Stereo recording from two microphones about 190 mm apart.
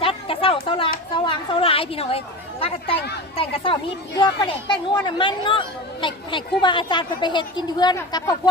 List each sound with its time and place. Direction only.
0.0 s chatter: 30° left (ahead or behind)
1.1 s speech: 25° left (ahead or behind)